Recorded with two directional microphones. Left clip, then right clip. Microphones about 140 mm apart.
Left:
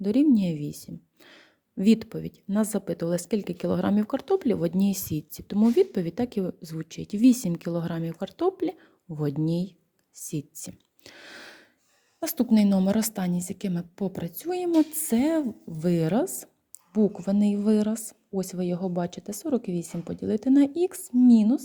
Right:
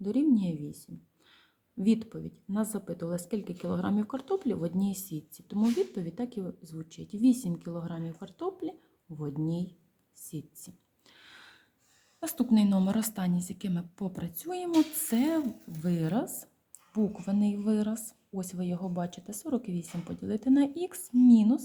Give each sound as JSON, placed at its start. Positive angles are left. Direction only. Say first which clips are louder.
{"t": 0.0, "sound": "a woman's voice", "louder": "left 5 dB", "side_deg": 50}
{"t": 10.2, "sound": "a sound", "louder": "left 9 dB", "side_deg": 55}
{"t": 12.2, "sound": "a woman's voice", "louder": "left 4 dB", "side_deg": 40}